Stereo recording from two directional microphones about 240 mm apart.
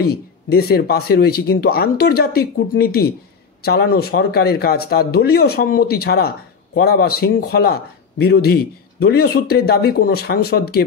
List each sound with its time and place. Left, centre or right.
0.0 s a man's voice: left